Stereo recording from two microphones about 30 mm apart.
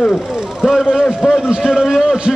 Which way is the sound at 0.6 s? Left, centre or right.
Centre.